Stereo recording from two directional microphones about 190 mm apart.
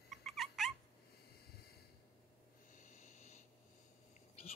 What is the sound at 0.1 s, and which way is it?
Cat, centre (ahead or behind).